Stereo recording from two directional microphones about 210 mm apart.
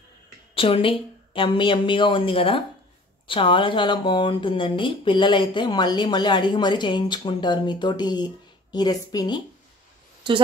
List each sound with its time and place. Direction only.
0.6 s speech: 25° left (ahead or behind)
10.3 s a woman's voice: 25° right (ahead or behind)